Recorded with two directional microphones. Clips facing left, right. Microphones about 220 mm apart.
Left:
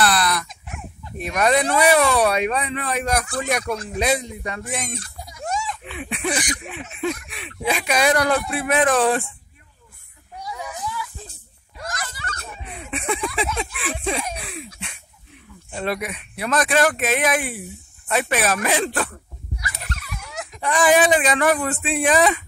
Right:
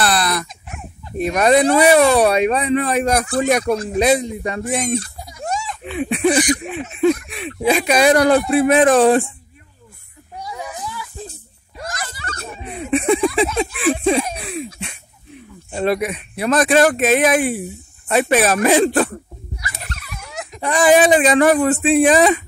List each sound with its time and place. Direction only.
0.0 s speech: 30° right (ahead or behind)
10.4 s a sound: 30° right (ahead or behind)
15.7 s speech: 30° right (ahead or behind)
19.8 s dog: 25° right (ahead or behind)
20.7 s speech: 35° right (ahead or behind)